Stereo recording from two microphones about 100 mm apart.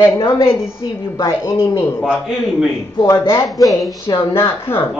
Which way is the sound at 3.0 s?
25° left (ahead or behind).